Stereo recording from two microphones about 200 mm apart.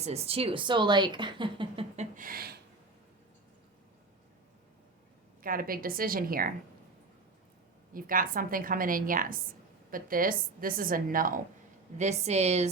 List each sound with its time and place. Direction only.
0.0 s a woman's voice: 30° right (ahead or behind)
2.1 s a sound: 45° right (ahead or behind)
5.4 s a woman's voice: 45° right (ahead or behind)
7.9 s a woman's voice: 45° right (ahead or behind)
11.9 s a woman's voice: 35° right (ahead or behind)